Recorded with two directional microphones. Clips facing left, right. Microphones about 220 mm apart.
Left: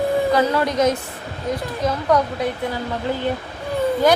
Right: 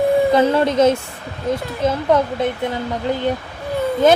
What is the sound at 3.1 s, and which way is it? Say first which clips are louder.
Speech: right 3 dB; 15° right (ahead or behind).